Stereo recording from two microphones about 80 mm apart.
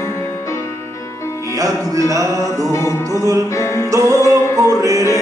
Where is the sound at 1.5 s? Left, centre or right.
Right.